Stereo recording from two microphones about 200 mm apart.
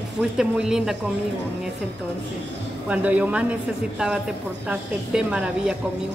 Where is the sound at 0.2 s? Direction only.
5° right (ahead or behind).